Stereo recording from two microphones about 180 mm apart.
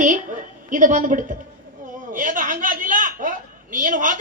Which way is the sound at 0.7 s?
45° right (ahead or behind).